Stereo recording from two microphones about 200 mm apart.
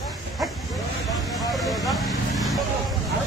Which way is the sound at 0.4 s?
Centre (ahead or behind).